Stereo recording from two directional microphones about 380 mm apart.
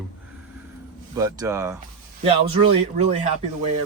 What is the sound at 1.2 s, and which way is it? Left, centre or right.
Speech, centre.